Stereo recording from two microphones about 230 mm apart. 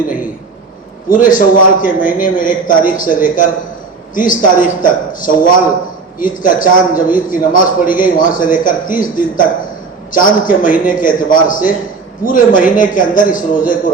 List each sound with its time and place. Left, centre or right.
1.1 s a man's voice: left